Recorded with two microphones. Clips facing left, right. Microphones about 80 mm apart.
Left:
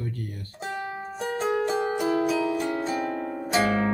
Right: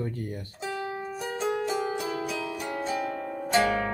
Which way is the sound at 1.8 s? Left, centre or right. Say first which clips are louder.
Left 6 dB; left.